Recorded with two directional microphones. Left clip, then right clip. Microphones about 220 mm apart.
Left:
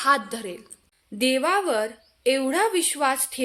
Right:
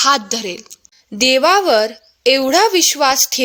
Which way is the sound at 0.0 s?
35° right (ahead or behind).